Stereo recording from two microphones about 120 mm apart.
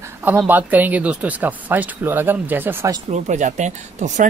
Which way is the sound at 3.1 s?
85° right.